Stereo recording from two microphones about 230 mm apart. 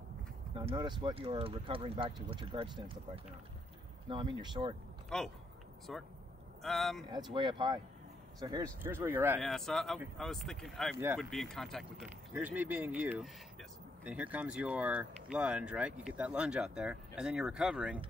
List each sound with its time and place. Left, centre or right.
0.6 s speech: centre
4.1 s speech: right
5.1 s speech: centre
7.3 s speech: centre
9.4 s speech: centre